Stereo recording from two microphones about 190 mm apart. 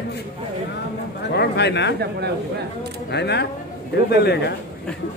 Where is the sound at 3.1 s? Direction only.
60° left (ahead or behind).